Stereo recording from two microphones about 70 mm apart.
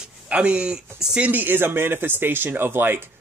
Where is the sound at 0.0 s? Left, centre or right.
Centre.